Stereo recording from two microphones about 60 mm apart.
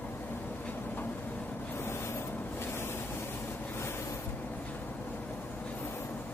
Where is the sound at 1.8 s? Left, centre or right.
Left.